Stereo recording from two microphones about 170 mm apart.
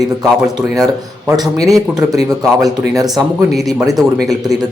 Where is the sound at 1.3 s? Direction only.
20° right (ahead or behind).